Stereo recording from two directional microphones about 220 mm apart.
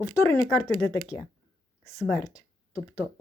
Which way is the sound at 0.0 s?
15° left (ahead or behind).